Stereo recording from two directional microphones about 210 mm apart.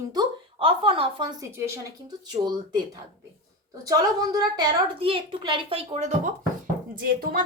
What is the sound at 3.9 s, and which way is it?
A woman's voice, 20° right (ahead or behind).